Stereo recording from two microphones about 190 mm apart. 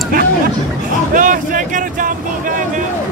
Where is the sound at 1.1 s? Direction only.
45° right (ahead or behind).